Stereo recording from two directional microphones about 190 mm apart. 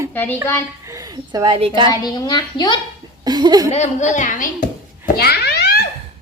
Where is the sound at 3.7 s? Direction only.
35° left (ahead or behind); by 5.8 s 55° left (ahead or behind).